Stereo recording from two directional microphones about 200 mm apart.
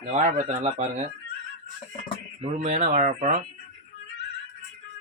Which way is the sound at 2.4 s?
35° right (ahead or behind).